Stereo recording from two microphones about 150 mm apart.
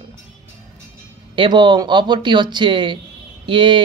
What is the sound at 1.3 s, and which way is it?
Speech, 35° right (ahead or behind).